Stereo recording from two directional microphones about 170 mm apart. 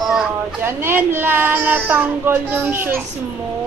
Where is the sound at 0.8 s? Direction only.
15° right (ahead or behind).